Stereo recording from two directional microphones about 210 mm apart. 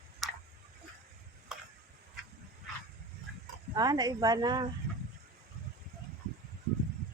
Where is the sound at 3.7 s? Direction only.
20° right (ahead or behind).